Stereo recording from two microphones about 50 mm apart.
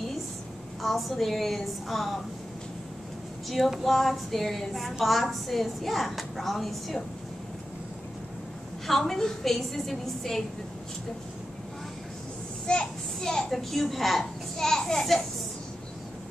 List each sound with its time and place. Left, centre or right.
0.8 s a woman's voice: centre
3.4 s a sound: centre
3.8 s a woman's voice: centre
8.8 s a woman's voice: centre
12.7 s a child's voice: centre
13.2 s a child's voice: centre